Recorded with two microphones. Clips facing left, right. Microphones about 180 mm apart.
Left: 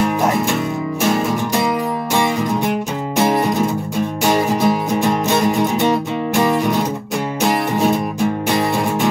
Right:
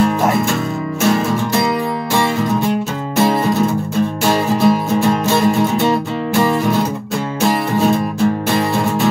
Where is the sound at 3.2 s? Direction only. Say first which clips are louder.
Right 2 dB; 20° left (ahead or behind).